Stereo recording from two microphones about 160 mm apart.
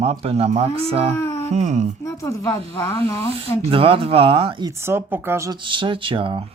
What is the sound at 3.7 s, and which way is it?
Speech, 35° right (ahead or behind).